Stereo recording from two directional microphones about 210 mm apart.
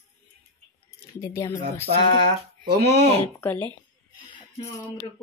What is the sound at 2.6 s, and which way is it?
Speech, 50° right (ahead or behind).